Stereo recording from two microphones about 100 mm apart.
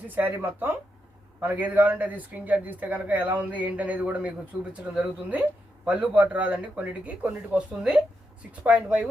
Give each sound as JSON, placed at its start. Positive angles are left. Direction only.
{"t": 0.1, "sound": "speech", "side_deg": -20}